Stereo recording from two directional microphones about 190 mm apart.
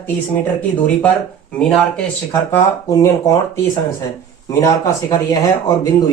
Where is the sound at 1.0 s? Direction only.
5° left (ahead or behind).